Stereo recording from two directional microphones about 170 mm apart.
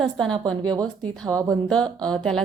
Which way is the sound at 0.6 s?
25° right (ahead or behind).